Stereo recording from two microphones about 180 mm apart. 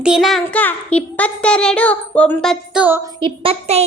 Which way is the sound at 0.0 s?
Centre (ahead or behind).